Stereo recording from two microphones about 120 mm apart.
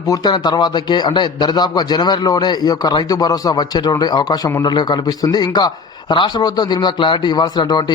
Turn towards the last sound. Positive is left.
turn(degrees=40)  # may be behind; listen again after turning